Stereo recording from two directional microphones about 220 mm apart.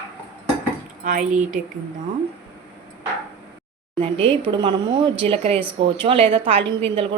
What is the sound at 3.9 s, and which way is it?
A woman's voice, 25° right (ahead or behind).